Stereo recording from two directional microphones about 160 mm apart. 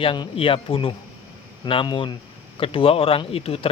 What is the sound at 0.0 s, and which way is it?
Speech, 30° left (ahead or behind).